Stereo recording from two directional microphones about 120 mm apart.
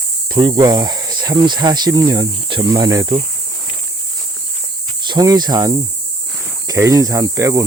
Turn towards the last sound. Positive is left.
turn(degrees=-30)  # may be behind; listen again after turning